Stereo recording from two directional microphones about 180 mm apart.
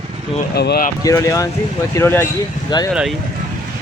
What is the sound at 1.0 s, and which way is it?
Speech, 15° left (ahead or behind).